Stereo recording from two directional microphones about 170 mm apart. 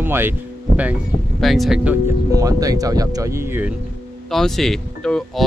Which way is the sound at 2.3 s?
20° right (ahead or behind).